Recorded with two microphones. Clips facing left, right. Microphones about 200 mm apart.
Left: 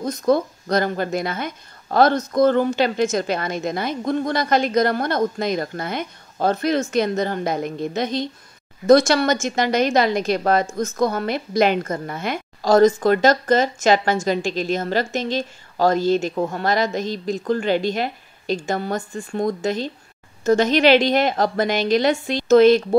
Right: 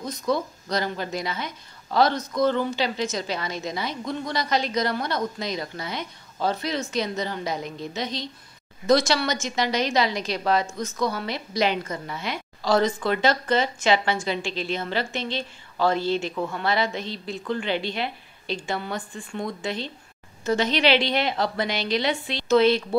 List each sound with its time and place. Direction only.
0.0 s a woman's voice: 50° left (ahead or behind)